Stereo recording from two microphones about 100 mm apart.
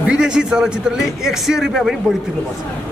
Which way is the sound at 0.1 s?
10° right (ahead or behind).